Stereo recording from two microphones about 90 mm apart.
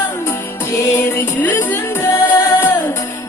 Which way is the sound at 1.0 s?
20° left (ahead or behind).